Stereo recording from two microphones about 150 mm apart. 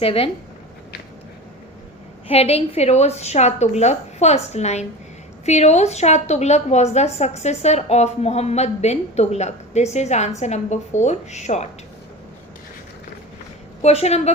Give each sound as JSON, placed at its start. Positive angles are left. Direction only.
{"t": 0.0, "sound": "speech", "side_deg": 40}
{"t": 2.2, "sound": "a woman's voice", "side_deg": 40}
{"t": 13.8, "sound": "a woman's voice", "side_deg": 45}